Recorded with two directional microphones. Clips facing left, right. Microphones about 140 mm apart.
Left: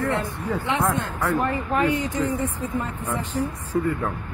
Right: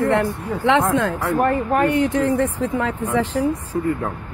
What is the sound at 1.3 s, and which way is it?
Speech, 50° right (ahead or behind).